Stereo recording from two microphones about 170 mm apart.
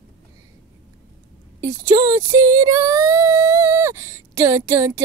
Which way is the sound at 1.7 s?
20° right (ahead or behind).